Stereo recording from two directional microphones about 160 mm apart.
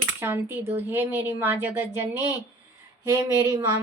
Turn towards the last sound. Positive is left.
turn(degrees=-20)  # may be behind; listen again after turning